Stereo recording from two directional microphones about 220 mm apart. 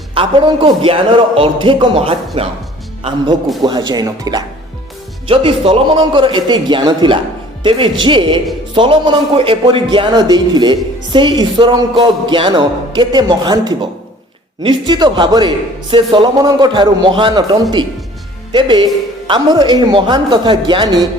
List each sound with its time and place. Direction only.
0.1 s speech: 25° right (ahead or behind)
3.6 s speech: 20° right (ahead or behind)
19.3 s speech: 20° right (ahead or behind)